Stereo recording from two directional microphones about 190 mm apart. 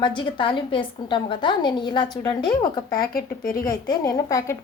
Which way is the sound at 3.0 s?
50° left (ahead or behind).